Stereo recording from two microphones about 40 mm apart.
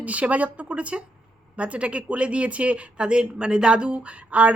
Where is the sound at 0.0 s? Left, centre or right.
Right.